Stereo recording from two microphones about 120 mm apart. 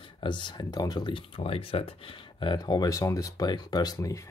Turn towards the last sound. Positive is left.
turn(degrees=30)  # may be behind; listen again after turning